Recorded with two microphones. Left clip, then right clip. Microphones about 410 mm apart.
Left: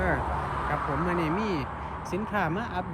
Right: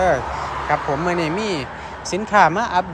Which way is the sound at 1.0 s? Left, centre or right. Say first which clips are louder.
Right 7 dB; centre.